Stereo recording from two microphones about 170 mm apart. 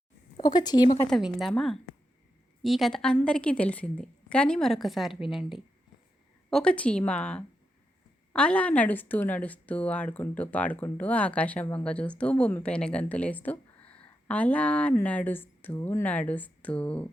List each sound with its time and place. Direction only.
0.3 s speech: 25° left (ahead or behind)
1.0 s a woman's voice: centre (ahead or behind)